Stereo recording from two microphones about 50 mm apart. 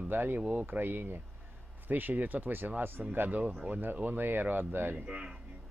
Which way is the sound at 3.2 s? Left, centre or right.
Right.